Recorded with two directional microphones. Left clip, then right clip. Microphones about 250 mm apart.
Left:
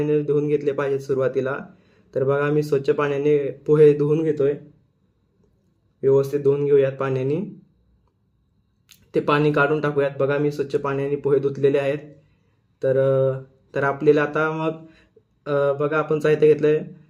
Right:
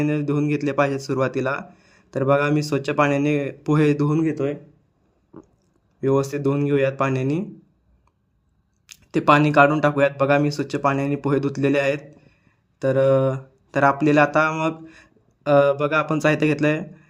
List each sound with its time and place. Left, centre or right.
0.0 s speech: right
6.0 s speech: right
8.9 s speech: right